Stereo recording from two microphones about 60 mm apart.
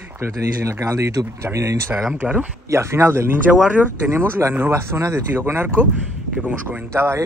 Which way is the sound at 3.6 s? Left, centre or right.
Right.